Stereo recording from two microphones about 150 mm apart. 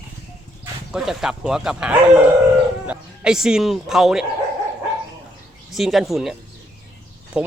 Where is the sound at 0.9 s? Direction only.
5° right (ahead or behind).